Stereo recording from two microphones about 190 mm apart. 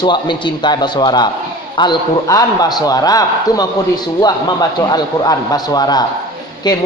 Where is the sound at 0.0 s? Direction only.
25° left (ahead or behind).